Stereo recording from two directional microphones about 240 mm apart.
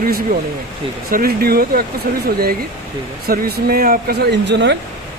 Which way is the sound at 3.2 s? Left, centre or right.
Right.